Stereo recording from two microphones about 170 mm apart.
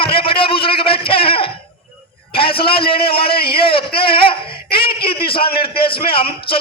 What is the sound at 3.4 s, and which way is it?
Speech, 65° left (ahead or behind).